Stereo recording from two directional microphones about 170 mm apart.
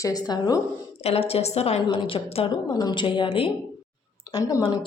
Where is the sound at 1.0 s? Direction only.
35° left (ahead or behind).